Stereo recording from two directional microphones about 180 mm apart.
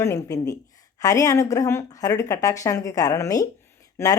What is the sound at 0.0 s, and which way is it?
Speech, 15° left (ahead or behind).